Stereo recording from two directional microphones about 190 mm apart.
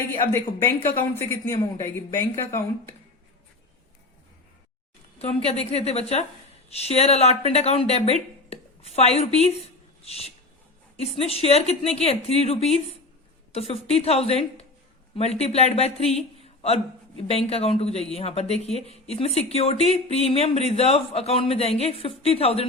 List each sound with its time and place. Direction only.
1.5 s speech: 15° left (ahead or behind)
5.2 s a man's voice: 30° left (ahead or behind)